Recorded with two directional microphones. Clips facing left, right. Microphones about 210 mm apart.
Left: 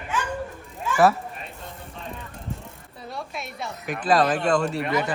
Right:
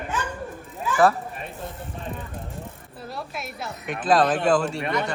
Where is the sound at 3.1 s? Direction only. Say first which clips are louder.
Even; centre (ahead or behind).